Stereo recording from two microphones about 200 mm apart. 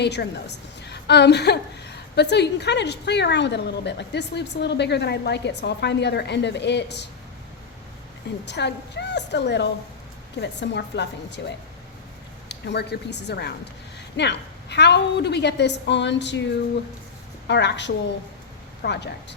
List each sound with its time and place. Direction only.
0.0 s a woman's voice: 60° left (ahead or behind)
8.4 s a woman's voice: 60° left (ahead or behind)
17.5 s a woman's voice: 60° left (ahead or behind)